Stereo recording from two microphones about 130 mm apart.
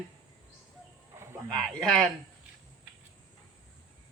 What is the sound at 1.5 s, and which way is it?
Speech, 5° left (ahead or behind).